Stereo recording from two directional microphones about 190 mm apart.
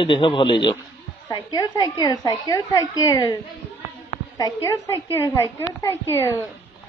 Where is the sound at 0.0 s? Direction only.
25° left (ahead or behind).